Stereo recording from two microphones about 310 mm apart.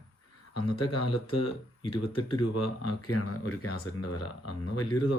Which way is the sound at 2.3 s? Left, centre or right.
Left.